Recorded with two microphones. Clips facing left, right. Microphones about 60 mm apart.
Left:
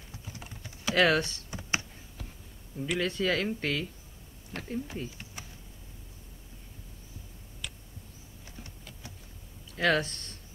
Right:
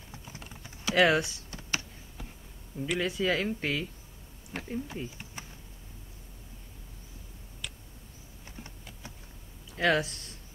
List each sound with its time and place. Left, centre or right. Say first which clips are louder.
0.4 s typing: even; centre
1.5 s computer keyboard: left 2 dB; centre
2.8 s speech: even; centre
7.6 s a sound: even; centre
9.7 s speech: even; centre